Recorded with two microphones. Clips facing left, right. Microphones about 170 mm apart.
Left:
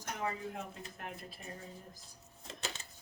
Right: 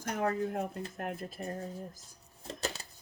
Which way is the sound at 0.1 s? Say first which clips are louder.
Right 7 dB; 50° right (ahead or behind).